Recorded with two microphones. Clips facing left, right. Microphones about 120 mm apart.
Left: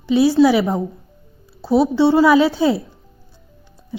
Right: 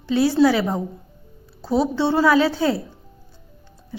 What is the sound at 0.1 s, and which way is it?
A woman's voice, 10° left (ahead or behind).